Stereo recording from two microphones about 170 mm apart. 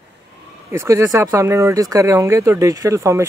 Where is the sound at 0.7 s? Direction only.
15° right (ahead or behind).